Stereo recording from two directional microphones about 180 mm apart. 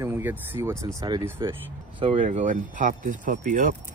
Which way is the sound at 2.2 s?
45° right (ahead or behind).